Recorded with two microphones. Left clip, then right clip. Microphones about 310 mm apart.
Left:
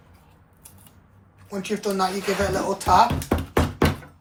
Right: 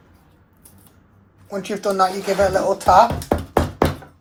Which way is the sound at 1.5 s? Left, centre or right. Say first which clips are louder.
Right 4 dB; right.